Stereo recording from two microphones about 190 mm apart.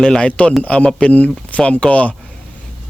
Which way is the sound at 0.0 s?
5° left (ahead or behind).